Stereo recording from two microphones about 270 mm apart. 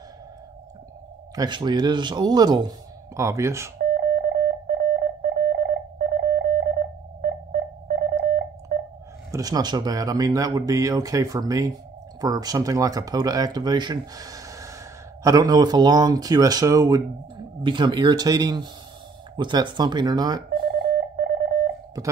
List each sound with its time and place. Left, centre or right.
1.3 s speech: centre
3.7 s telephone dialing: right
9.3 s speech: centre
20.6 s telephone dialing: right